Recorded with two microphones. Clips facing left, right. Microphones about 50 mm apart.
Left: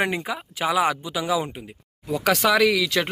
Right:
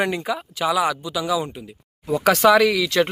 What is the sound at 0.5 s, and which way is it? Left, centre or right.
Speech, left.